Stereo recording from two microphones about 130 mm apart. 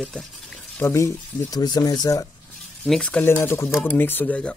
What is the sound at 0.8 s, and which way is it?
Speech, 25° left (ahead or behind).